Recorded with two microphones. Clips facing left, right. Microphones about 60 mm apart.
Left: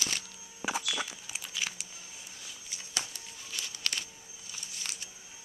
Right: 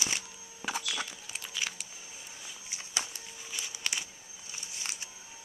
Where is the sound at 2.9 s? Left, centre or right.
Centre.